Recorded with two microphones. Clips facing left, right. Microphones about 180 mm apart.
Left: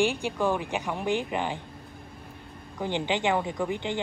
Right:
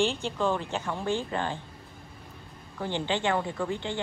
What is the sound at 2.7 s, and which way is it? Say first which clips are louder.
Speech: left 2 dB; 15° left (ahead or behind).